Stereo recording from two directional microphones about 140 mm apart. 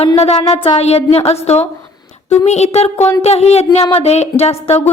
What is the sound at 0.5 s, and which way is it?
A woman's voice, 45° left (ahead or behind).